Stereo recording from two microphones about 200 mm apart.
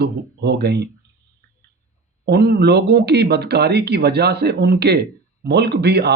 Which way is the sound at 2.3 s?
50° right (ahead or behind).